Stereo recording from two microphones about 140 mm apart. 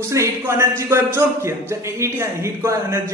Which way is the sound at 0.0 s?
20° right (ahead or behind).